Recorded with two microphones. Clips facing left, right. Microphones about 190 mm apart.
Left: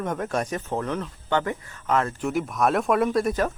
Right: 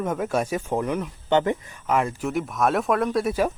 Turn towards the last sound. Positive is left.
turn(degrees=-5)  # may be behind; listen again after turning